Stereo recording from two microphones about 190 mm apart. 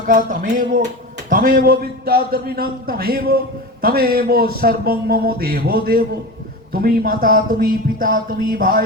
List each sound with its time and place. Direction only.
0.1 s a man's voice: 45° right (ahead or behind)